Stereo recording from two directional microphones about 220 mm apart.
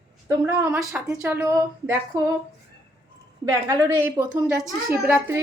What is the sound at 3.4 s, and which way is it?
A woman's voice, 15° right (ahead or behind).